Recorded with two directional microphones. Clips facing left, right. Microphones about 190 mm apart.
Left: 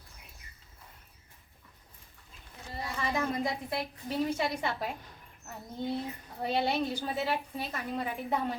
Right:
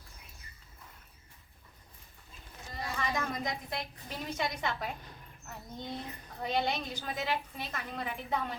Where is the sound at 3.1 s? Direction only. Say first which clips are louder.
Left 6 dB; 30° left (ahead or behind).